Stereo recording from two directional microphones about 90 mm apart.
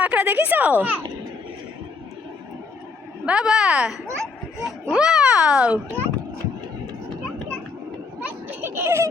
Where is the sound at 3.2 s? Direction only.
10° right (ahead or behind).